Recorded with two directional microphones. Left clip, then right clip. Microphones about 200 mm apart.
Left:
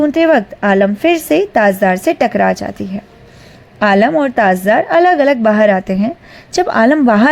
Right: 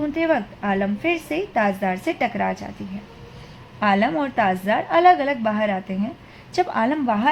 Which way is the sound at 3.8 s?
35° left (ahead or behind).